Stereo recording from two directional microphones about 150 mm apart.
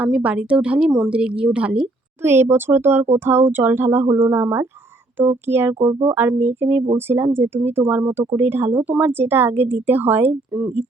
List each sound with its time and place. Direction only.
0.0 s speech: 10° right (ahead or behind)